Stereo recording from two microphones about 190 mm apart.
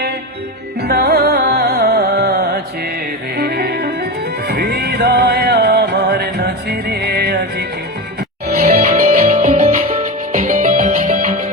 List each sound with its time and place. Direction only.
0.8 s music: 55° right (ahead or behind)
8.5 s music: 45° right (ahead or behind)